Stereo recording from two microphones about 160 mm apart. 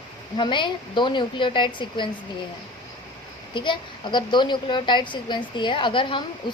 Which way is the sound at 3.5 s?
30° left (ahead or behind).